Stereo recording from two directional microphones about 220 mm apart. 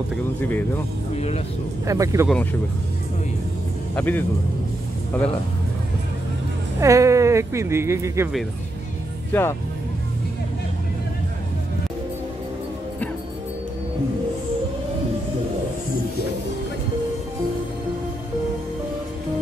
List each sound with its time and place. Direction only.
0.4 s speech: 10° left (ahead or behind)
1.1 s vehicle: 30° left (ahead or behind)
1.9 s speech: 15° right (ahead or behind)
3.9 s speech: 10° left (ahead or behind)
6.8 s speech: 15° right (ahead or behind)
9.3 s speech: 10° left (ahead or behind)